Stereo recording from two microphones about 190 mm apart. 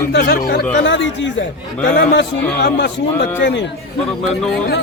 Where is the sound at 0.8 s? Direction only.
75° left (ahead or behind).